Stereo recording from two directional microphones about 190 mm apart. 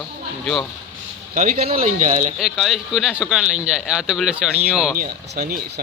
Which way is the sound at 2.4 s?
Centre (ahead or behind).